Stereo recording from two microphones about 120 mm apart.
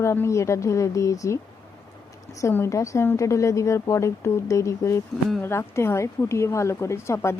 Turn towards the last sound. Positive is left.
turn(degrees=20)  # may be behind; listen again after turning